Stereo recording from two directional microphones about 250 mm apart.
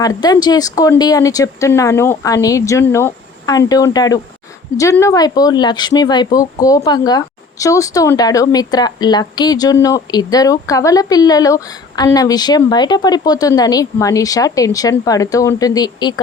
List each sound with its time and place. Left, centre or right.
0.0 s speech: centre